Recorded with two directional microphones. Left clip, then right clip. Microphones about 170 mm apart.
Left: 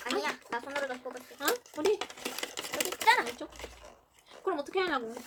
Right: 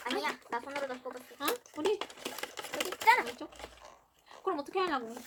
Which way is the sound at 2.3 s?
20° left (ahead or behind).